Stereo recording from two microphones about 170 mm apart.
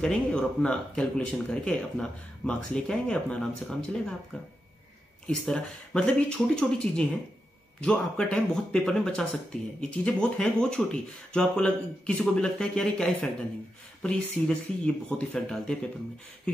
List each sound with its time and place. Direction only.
0.0 s speech: 5° left (ahead or behind)
5.2 s speech: 5° left (ahead or behind)
16.5 s a sound: 5° left (ahead or behind)